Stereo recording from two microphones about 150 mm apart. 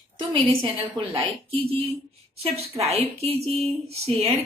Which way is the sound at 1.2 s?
40° right (ahead or behind).